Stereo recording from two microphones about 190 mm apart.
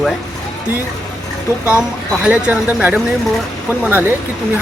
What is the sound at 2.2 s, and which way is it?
Speech, 5° right (ahead or behind).